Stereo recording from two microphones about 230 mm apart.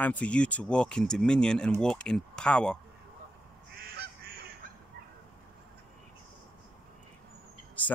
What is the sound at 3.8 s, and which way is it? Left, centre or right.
Goose, right.